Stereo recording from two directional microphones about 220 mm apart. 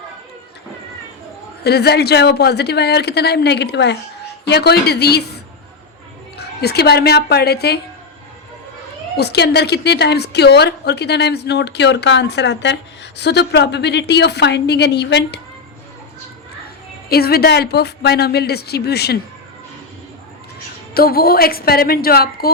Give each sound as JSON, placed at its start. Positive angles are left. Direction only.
{"t": 1.6, "sound": "a woman's voice", "side_deg": 45}
{"t": 6.3, "sound": "speech", "side_deg": 45}
{"t": 9.1, "sound": "a woman's voice", "side_deg": 50}
{"t": 17.1, "sound": "a woman's voice", "side_deg": 45}
{"t": 20.9, "sound": "a woman's voice", "side_deg": 45}